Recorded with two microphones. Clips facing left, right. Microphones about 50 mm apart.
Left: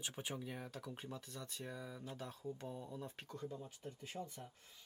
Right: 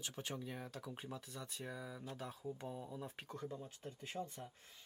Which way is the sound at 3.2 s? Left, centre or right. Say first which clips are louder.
Right 1 dB; right.